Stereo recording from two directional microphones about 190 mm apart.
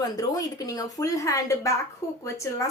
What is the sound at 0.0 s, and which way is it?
A woman's voice, 20° left (ahead or behind).